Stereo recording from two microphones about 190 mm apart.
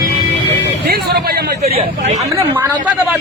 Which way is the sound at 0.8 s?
55° right (ahead or behind).